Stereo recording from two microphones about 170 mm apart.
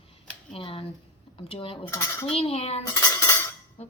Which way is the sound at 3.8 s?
40° left (ahead or behind).